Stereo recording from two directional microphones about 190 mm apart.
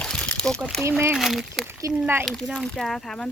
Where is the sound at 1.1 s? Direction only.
Centre (ahead or behind).